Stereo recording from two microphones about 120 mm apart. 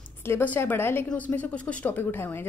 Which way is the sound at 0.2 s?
15° left (ahead or behind).